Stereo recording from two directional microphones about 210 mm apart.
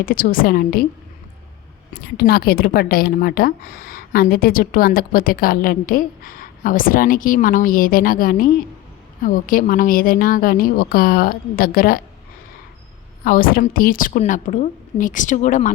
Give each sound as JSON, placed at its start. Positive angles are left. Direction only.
{"t": 0.0, "sound": "a woman's voice", "side_deg": 40}
{"t": 2.1, "sound": "speech", "side_deg": 45}
{"t": 13.2, "sound": "a woman's voice", "side_deg": 45}